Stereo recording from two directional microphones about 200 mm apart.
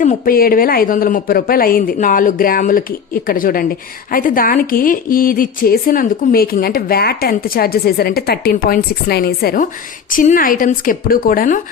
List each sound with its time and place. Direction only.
0.0 s speech: 40° left (ahead or behind)